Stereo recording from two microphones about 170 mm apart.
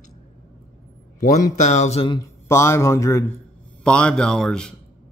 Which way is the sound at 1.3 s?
45° left (ahead or behind).